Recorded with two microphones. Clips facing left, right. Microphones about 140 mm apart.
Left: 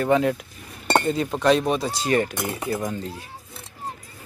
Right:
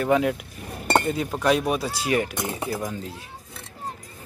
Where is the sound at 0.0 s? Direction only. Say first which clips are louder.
Left 1 dB; 5° right (ahead or behind).